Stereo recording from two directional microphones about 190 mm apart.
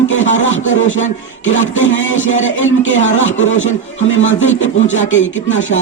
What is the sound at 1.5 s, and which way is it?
Speech, 85° left.